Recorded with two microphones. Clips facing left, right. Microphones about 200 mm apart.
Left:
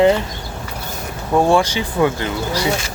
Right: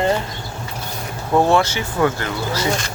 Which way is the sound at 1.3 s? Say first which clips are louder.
Left 1 dB; 10° left (ahead or behind).